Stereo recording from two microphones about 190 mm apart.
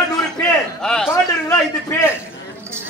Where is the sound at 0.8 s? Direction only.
5° left (ahead or behind).